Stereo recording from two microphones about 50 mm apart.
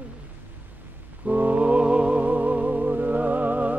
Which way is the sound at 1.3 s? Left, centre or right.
Right.